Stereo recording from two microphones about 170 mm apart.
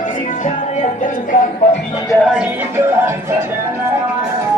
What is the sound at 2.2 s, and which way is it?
Music, 5° right (ahead or behind).